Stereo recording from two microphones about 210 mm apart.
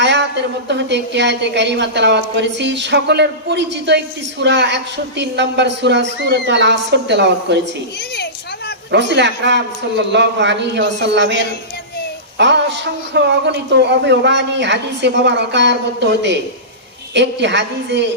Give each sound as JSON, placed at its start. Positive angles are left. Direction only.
{"t": 0.0, "sound": "a sound", "side_deg": -55}
{"t": 0.7, "sound": "a woman's voice", "side_deg": -55}
{"t": 8.9, "sound": "a woman's voice", "side_deg": -55}